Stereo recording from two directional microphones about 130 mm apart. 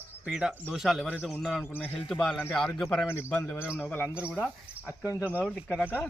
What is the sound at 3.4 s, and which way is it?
Speech, 20° left (ahead or behind).